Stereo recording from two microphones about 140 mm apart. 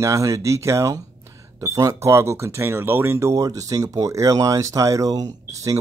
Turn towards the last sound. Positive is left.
turn(degrees=-25)  # may be behind; listen again after turning